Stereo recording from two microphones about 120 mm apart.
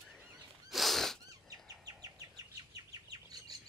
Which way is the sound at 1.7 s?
30° right (ahead or behind).